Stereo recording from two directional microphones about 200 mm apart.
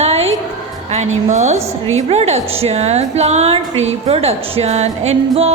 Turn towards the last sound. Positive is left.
turn(degrees=-30)  # may be behind; listen again after turning